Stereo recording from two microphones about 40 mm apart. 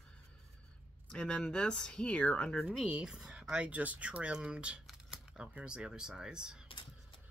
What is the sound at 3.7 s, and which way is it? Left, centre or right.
Speech, right.